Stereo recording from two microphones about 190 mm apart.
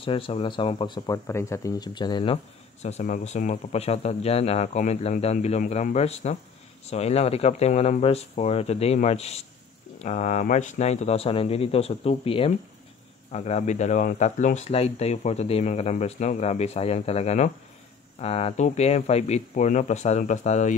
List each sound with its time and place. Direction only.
0.0 s speech: 30° left (ahead or behind)